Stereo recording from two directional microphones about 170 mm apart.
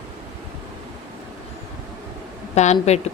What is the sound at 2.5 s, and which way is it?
Speech, 40° left (ahead or behind).